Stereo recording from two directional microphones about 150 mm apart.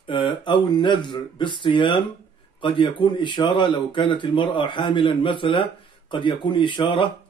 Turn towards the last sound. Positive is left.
turn(degrees=35)  # may be behind; listen again after turning